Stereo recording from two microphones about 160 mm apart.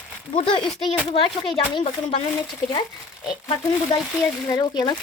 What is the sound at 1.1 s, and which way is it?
Speech, 30° left (ahead or behind).